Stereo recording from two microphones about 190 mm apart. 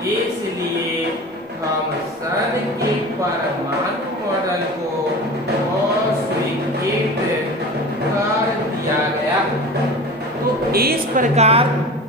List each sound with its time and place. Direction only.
10.7 s a woman's voice: 55° right (ahead or behind)
11.3 s a woman's voice: 35° right (ahead or behind)